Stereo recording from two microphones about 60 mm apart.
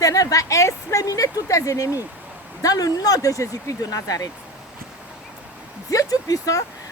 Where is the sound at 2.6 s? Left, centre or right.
Left.